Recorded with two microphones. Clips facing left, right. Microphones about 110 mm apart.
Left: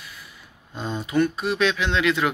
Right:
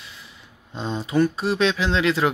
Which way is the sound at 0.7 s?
30° right (ahead or behind).